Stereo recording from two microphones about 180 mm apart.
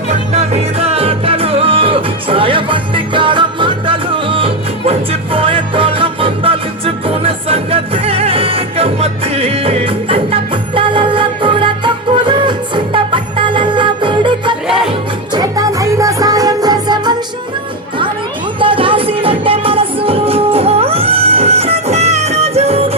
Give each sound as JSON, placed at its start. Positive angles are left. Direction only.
{"t": 0.1, "sound": "music", "side_deg": -35}
{"t": 18.6, "sound": "music", "side_deg": -30}